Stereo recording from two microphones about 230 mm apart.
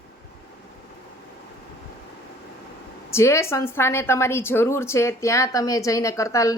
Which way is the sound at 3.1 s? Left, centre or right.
Centre.